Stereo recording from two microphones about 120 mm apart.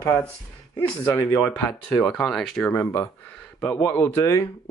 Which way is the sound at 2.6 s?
25° left (ahead or behind).